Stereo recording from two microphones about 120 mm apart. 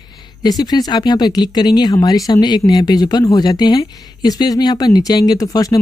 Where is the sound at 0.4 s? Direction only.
35° left (ahead or behind).